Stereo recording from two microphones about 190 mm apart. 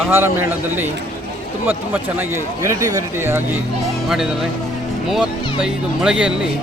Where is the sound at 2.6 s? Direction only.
15° right (ahead or behind).